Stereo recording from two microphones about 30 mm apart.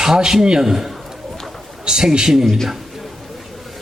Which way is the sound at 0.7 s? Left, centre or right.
Centre.